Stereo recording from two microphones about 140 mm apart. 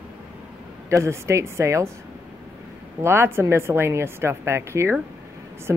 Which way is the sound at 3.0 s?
15° right (ahead or behind).